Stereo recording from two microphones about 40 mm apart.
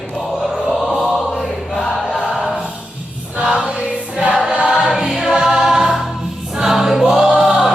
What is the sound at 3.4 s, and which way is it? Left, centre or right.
Choir, centre.